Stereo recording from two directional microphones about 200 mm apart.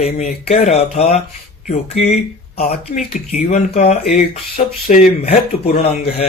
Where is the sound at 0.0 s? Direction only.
35° left (ahead or behind).